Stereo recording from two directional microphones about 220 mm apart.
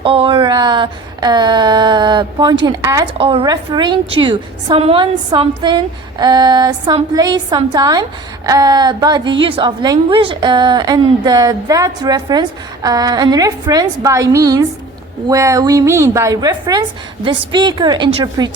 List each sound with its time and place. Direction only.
0.0 s a woman's voice: 25° right (ahead or behind)